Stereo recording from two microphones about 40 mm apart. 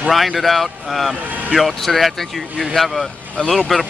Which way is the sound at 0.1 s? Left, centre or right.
Centre.